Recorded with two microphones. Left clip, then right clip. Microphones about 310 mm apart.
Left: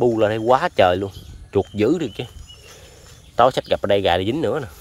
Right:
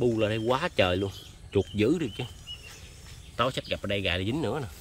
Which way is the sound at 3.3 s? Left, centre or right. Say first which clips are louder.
Left 13 dB; centre.